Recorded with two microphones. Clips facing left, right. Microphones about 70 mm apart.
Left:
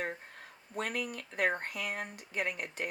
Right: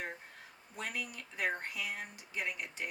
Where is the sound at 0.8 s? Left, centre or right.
Left.